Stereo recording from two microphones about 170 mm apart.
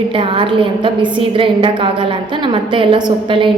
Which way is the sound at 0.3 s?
30° right (ahead or behind).